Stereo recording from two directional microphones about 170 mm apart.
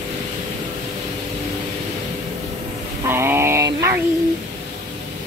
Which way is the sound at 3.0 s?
15° right (ahead or behind).